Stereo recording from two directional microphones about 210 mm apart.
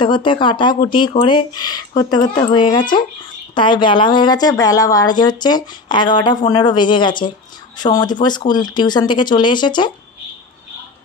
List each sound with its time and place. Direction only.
0.0 s speech: 25° left (ahead or behind)